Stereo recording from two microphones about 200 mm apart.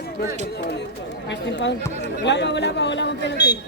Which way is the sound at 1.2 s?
60° left (ahead or behind).